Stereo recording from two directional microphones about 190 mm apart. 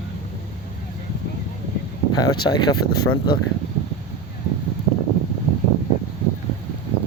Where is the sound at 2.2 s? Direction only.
20° left (ahead or behind).